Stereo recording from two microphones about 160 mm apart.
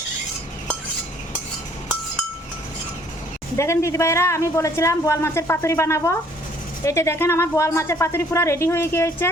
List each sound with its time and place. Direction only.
3.6 s speech: 15° left (ahead or behind)